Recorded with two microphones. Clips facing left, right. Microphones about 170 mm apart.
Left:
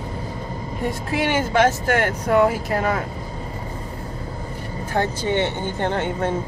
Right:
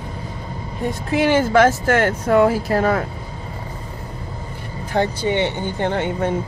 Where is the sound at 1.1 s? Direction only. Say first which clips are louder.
Right 5 dB; 30° right (ahead or behind).